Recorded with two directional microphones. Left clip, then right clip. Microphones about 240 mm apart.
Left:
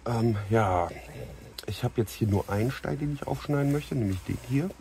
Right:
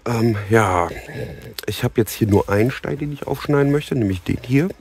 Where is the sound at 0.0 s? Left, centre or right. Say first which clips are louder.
Right 8 dB; right.